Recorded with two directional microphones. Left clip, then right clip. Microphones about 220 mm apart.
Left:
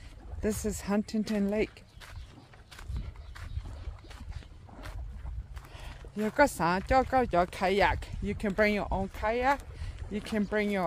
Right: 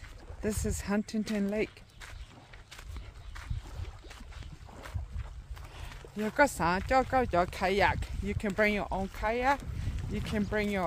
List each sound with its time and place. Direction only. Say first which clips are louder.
0.4 s speech: left 2 dB; 20° left (ahead or behind)
5.8 s a sound: left 2 dB; 20° left (ahead or behind)
6.9 s speech: left 2 dB; 15° left (ahead or behind)